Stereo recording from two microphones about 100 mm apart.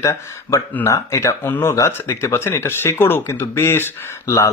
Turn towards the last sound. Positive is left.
turn(degrees=30)  # may be behind; listen again after turning